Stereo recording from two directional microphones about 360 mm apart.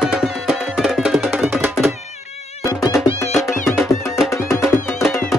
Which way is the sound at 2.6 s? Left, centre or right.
Centre.